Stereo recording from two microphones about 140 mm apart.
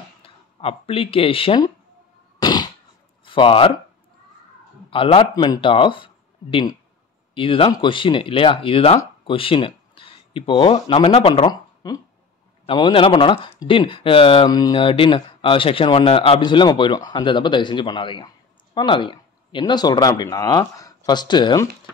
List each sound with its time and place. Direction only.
0.2 s speech: 45° left (ahead or behind)
2.4 s a sound: 30° left (ahead or behind)
3.3 s speech: 40° left (ahead or behind)
4.9 s speech: 40° left (ahead or behind)
5.3 s speech: 30° left (ahead or behind)